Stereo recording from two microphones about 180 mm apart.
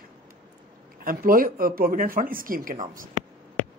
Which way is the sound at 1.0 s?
50° right (ahead or behind).